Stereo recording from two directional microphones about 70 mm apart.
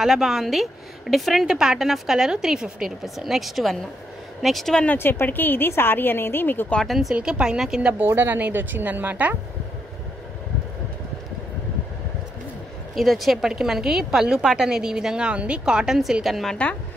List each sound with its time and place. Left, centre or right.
0.0 s a woman's voice: centre
4.8 s speech: left
6.9 s a woman's voice: centre
7.2 s speech: centre
8.1 s speech: right
12.9 s speech: centre